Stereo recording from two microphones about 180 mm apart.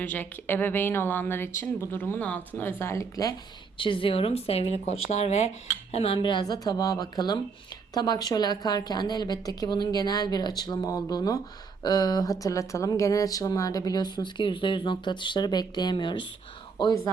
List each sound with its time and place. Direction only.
0.0 s speech: 10° left (ahead or behind)
3.8 s speech: 30° left (ahead or behind)